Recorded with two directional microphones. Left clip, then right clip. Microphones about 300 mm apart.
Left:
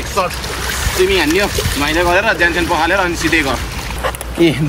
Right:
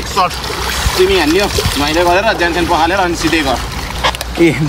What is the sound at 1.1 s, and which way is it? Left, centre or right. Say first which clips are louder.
Speech: right 2 dB; centre.